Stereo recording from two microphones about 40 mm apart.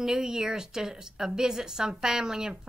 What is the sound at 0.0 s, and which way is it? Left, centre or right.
A woman's voice, centre.